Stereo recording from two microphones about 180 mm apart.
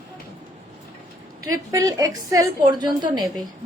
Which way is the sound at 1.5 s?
20° right (ahead or behind).